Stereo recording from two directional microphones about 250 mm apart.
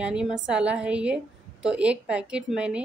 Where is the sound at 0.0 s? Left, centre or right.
Centre.